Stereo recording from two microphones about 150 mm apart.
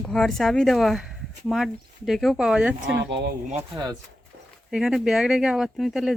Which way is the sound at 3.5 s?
20° right (ahead or behind).